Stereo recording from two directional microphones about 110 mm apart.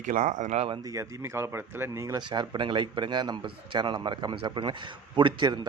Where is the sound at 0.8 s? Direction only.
30° right (ahead or behind).